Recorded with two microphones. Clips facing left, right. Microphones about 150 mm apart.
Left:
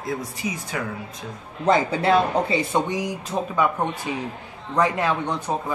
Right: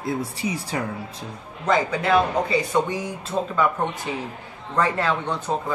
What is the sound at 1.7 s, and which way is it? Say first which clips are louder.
A man's voice: left 2 dB; 30° left (ahead or behind).